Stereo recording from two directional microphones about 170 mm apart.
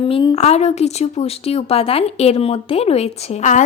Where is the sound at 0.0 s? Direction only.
30° left (ahead or behind).